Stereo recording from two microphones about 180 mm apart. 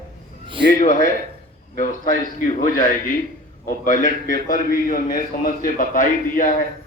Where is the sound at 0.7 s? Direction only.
45° left (ahead or behind).